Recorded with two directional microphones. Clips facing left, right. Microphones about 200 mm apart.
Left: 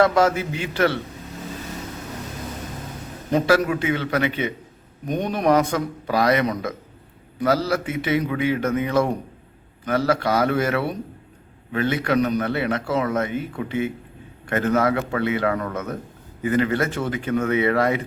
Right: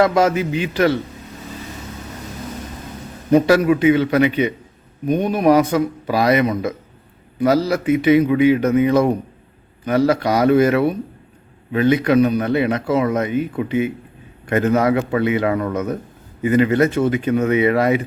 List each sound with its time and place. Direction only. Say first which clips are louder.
0.0 s a man's voice: right 2 dB; 15° right (ahead or behind)
3.3 s a man's voice: right 6 dB; 20° right (ahead or behind)